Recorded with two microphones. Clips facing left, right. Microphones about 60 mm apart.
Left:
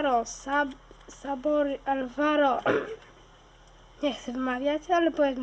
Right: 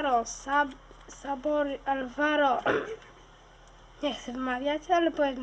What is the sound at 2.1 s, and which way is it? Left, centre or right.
Speech, centre.